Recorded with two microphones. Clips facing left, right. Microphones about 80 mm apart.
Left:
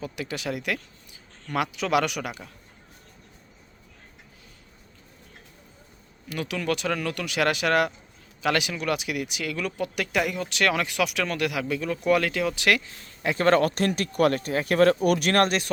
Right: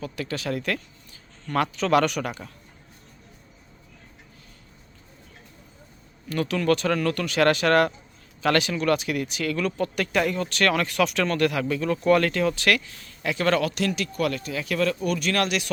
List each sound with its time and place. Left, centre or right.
0.0 s speech: centre
6.2 s speech: centre
12.5 s speech: centre; by 14.9 s left
15.0 s speech: left
15.4 s speech: left